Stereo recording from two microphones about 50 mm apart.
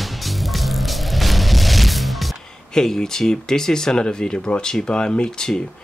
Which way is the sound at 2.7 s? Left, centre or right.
Centre.